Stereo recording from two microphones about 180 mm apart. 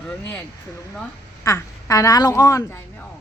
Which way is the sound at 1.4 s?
20° left (ahead or behind).